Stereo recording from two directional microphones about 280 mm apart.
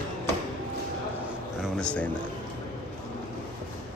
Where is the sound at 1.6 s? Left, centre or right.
Centre.